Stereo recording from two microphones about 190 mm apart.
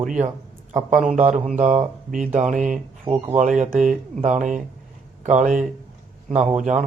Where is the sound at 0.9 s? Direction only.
40° right (ahead or behind).